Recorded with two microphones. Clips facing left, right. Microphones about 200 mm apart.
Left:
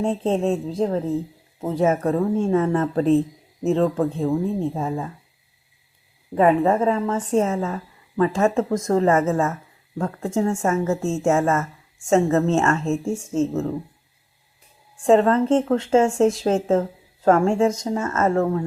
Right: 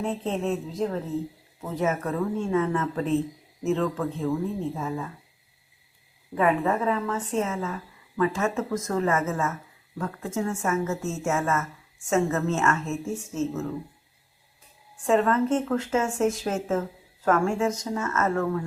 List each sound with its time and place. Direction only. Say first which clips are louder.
0.0 s a woman's voice: left 6 dB; 30° left (ahead or behind)
6.3 s a woman's voice: left 6 dB; 35° left (ahead or behind)
15.0 s a woman's voice: left 6 dB; 30° left (ahead or behind)